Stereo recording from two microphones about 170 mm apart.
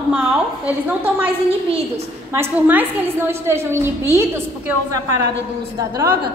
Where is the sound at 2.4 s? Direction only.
10° right (ahead or behind).